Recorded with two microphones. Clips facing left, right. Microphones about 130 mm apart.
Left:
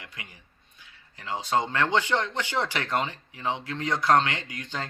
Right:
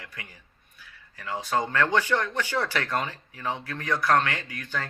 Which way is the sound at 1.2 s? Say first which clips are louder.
Left 1 dB; 25° left (ahead or behind).